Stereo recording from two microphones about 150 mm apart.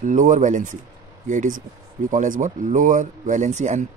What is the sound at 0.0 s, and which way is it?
A man's voice, 60° right (ahead or behind).